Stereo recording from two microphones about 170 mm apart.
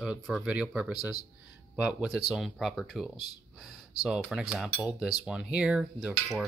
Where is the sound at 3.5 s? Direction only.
Centre (ahead or behind).